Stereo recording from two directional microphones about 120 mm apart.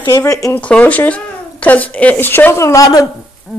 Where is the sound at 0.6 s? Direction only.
10° left (ahead or behind); by 3.1 s 30° left (ahead or behind).